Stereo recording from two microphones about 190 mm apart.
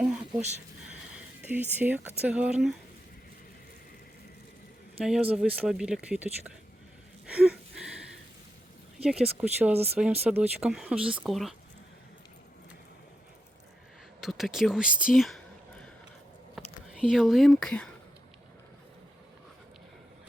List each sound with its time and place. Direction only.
0.0 s a sound: 5° right (ahead or behind)
1.8 s speech: 10° right (ahead or behind)
5.0 s speech: 5° right (ahead or behind)
7.3 s a sound: 5° right (ahead or behind)
9.0 s speech: 5° right (ahead or behind)
9.7 s speech: 30° right (ahead or behind)
10.2 s speech: 10° right (ahead or behind)
14.2 s speech: centre (ahead or behind)
16.6 s speech: 5° right (ahead or behind)